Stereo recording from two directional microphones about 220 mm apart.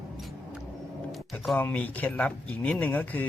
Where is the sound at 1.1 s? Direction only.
Centre (ahead or behind).